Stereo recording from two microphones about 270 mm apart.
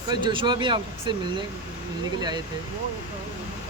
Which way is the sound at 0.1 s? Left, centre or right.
Centre.